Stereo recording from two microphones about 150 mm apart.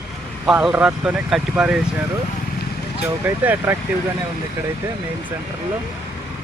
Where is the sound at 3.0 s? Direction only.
10° right (ahead or behind).